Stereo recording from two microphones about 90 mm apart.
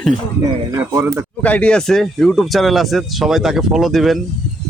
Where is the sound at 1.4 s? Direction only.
15° left (ahead or behind).